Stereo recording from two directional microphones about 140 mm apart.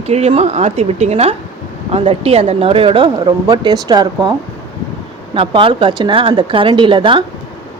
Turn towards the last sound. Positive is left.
turn(degrees=-35)  # may be behind; listen again after turning